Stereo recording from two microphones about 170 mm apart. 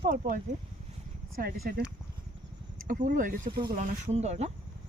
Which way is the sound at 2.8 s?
55° right (ahead or behind).